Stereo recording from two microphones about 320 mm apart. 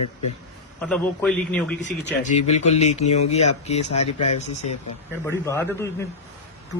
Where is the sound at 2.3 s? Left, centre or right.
Left.